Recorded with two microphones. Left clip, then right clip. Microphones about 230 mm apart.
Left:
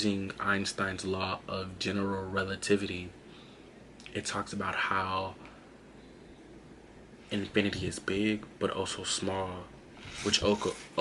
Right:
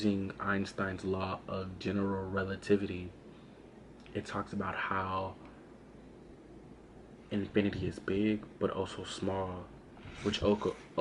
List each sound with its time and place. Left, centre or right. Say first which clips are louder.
0.0 s speech: left 3 dB; centre
2.0 s speech: left 2 dB; centre
2.3 s speech: left 2 dB; centre
4.1 s speech: left 3 dB; centre
7.3 s speech: left 2 dB; centre